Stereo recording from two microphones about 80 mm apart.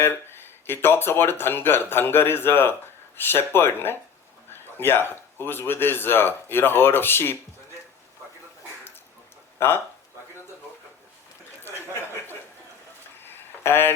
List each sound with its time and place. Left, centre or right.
0.0 s a man's voice: left
9.6 s speech: left
11.6 s chuckle: left
13.2 s a sound: left